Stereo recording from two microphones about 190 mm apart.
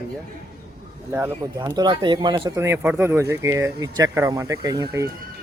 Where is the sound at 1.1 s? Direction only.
10° right (ahead or behind).